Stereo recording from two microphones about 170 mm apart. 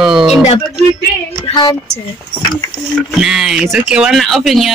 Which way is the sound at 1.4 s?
25° left (ahead or behind).